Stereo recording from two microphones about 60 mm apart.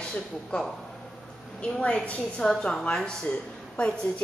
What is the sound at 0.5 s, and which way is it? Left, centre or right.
A woman's voice, centre.